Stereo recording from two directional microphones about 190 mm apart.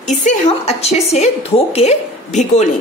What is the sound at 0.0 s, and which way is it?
A woman's voice, 40° left (ahead or behind).